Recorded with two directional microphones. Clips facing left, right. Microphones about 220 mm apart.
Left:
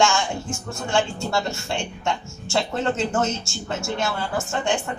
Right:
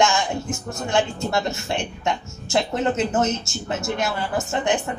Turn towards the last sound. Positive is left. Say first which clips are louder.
# right 2 dB
turn(degrees=-20)  # may be behind; listen again after turning